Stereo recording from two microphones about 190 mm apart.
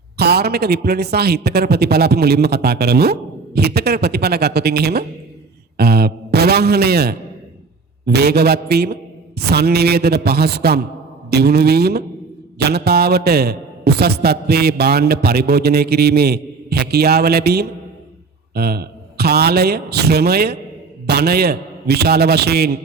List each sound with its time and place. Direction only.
0.2 s a man's voice: 60° right (ahead or behind)